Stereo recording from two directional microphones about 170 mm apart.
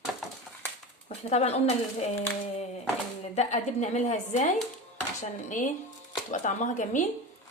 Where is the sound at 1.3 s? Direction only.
40° left (ahead or behind).